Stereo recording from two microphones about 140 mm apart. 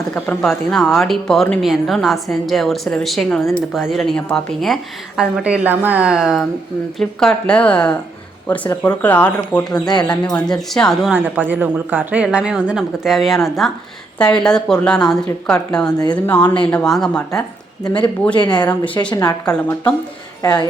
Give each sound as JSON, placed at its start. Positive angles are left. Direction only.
{"t": 0.0, "sound": "a woman's voice", "side_deg": 5}
{"t": 5.4, "sound": "a woman's voice", "side_deg": -10}
{"t": 11.1, "sound": "a woman's voice", "side_deg": -15}
{"t": 18.3, "sound": "speech", "side_deg": 30}
{"t": 19.5, "sound": "speech", "side_deg": 10}
{"t": 20.4, "sound": "speech", "side_deg": 30}